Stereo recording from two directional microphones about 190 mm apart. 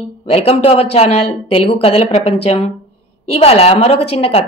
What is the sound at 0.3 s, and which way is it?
A woman's voice, 30° left (ahead or behind).